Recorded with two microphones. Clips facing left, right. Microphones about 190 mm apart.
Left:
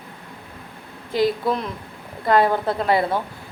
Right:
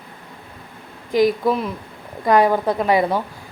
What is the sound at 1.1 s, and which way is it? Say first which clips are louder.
Speech: right 4 dB; 10° right (ahead or behind).